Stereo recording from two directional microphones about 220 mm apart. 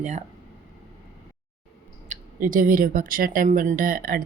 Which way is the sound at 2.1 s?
35° right (ahead or behind).